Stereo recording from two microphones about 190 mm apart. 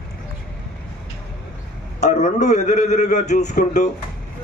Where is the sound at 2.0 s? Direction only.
40° left (ahead or behind).